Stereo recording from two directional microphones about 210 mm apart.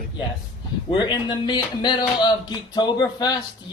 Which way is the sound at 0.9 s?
20° left (ahead or behind).